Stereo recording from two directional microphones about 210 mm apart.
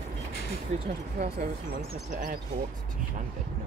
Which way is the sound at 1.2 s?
35° right (ahead or behind).